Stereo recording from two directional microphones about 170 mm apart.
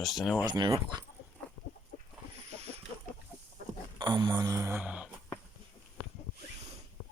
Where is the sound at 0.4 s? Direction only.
25° right (ahead or behind).